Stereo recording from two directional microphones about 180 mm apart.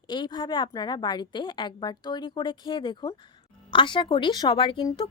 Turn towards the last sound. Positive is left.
turn(degrees=25)  # may be behind; listen again after turning